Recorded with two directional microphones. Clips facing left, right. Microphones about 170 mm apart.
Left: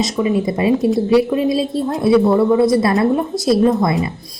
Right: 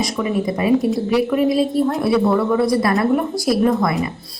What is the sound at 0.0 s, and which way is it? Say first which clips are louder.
Speech: left 3 dB; 25° left (ahead or behind).